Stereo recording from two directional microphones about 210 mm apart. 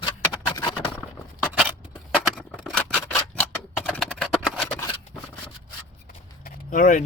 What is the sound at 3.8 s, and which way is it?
Clip-clop, centre (ahead or behind).